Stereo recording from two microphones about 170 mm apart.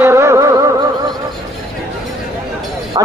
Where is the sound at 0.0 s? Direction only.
15° right (ahead or behind).